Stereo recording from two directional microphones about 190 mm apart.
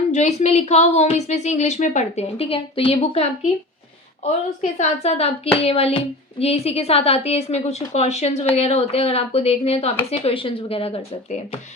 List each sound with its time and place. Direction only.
0.1 s a woman's voice: 35° left (ahead or behind)
4.8 s a woman's voice: 35° left (ahead or behind)